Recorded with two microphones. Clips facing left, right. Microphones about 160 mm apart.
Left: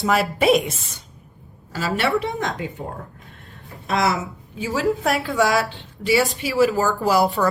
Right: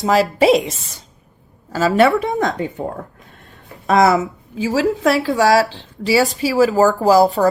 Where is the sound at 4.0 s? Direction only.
45° right (ahead or behind).